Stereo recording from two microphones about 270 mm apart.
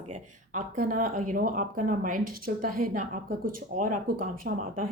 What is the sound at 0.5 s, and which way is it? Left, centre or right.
Speech, right.